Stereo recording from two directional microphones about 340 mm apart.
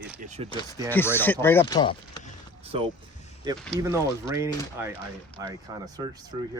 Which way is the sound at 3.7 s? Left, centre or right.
Centre.